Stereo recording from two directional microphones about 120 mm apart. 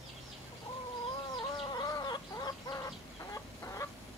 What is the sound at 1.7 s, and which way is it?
Chicken, 35° left (ahead or behind).